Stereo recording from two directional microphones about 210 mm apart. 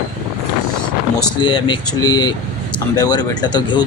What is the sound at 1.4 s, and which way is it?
Speech, 25° left (ahead or behind).